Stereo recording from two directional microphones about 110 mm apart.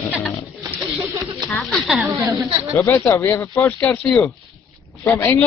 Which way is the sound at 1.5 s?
Centre (ahead or behind).